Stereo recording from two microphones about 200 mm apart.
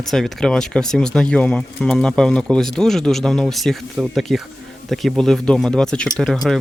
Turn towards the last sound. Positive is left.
turn(degrees=5)  # may be behind; listen again after turning